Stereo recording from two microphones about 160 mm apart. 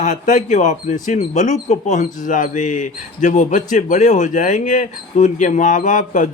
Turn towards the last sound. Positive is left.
turn(degrees=55)  # may be behind; listen again after turning